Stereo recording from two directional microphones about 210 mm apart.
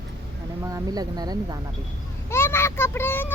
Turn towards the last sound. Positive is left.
turn(degrees=10)  # may be behind; listen again after turning